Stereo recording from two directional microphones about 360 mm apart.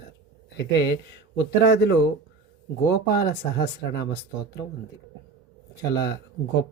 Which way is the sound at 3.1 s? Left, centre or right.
Left.